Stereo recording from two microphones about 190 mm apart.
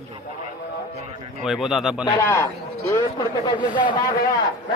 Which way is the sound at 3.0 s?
25° left (ahead or behind).